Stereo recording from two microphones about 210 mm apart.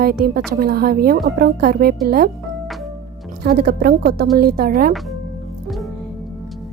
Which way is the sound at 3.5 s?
45° right (ahead or behind).